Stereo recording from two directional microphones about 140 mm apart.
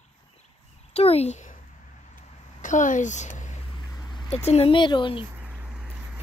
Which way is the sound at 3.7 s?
30° left (ahead or behind).